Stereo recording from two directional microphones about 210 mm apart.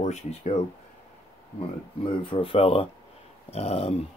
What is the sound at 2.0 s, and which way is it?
Speech, 25° left (ahead or behind).